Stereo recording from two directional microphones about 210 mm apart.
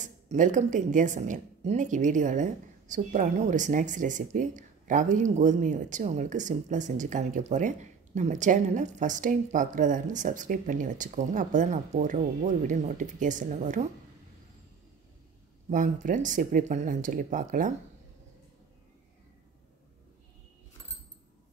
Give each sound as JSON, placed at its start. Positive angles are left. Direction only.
{"t": 0.0, "sound": "a woman's voice", "side_deg": -35}
{"t": 15.7, "sound": "a woman's voice", "side_deg": -40}